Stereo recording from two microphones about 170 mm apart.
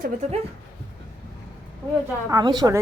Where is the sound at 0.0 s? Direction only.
40° right (ahead or behind).